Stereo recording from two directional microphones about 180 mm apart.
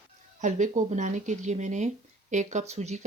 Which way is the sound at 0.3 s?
45° right (ahead or behind).